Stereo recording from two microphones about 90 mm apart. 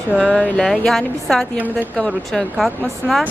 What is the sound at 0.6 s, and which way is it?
A woman's voice, 5° left (ahead or behind).